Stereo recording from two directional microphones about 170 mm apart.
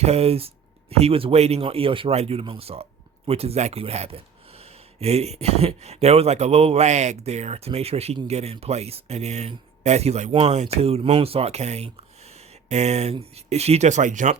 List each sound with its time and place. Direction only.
0.0 s speech: 40° right (ahead or behind)